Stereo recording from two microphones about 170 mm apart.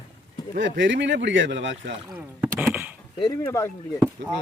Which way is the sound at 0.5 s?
90° right.